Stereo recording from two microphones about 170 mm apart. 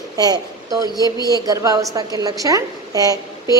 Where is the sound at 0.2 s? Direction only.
20° right (ahead or behind).